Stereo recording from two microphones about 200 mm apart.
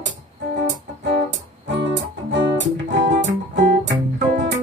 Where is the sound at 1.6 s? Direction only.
65° right (ahead or behind).